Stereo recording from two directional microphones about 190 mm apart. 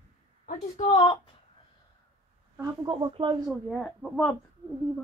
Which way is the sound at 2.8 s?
25° right (ahead or behind).